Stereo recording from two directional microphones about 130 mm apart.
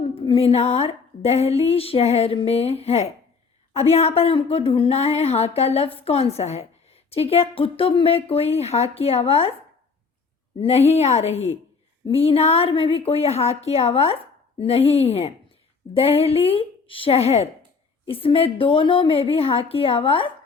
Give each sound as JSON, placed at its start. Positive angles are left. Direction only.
{"t": 0.1, "sound": "speech", "side_deg": 45}
{"t": 10.6, "sound": "speech", "side_deg": 50}